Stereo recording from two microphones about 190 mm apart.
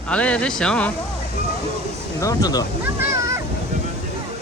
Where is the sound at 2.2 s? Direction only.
20° left (ahead or behind).